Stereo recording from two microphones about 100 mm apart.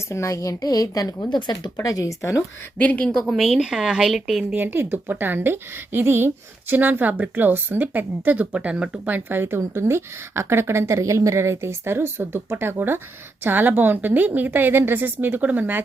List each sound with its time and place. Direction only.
0.1 s a woman's voice: 30° left (ahead or behind)
2.7 s a woman's voice: 15° left (ahead or behind)
3.2 s a woman's voice: centre (ahead or behind)
4.5 s a woman's voice: 20° right (ahead or behind)